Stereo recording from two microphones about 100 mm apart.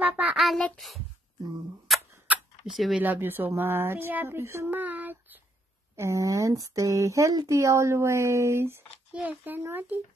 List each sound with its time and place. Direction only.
0.0 s child singing: 15° right (ahead or behind)
0.7 s speech: centre (ahead or behind)
1.9 s clock: centre (ahead or behind)
2.3 s a sound: 15° right (ahead or behind)
2.6 s speech: centre (ahead or behind)
3.0 s speech: 20° right (ahead or behind)
5.9 s speech: 30° right (ahead or behind)
9.1 s a child's voice: 15° right (ahead or behind)